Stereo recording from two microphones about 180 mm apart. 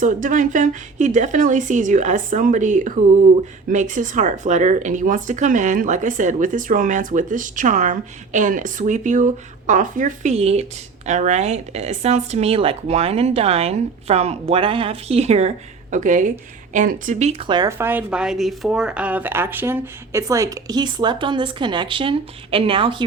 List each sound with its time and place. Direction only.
0.0 s speech: 45° right (ahead or behind)
17.4 s speech: 25° right (ahead or behind)
17.7 s speech: 15° right (ahead or behind); by 23.0 s 30° right (ahead or behind)